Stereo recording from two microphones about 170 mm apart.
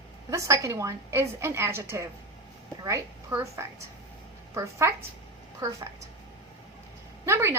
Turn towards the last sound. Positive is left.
turn(degrees=-15)  # may be behind; listen again after turning